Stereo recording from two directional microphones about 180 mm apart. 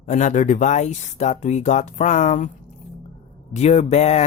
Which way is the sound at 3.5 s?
40° left (ahead or behind).